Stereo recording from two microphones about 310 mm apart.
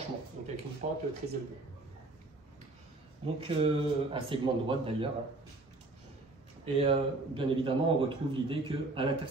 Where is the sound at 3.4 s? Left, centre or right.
Centre.